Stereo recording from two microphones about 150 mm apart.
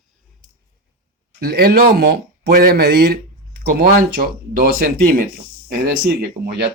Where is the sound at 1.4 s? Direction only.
90° right.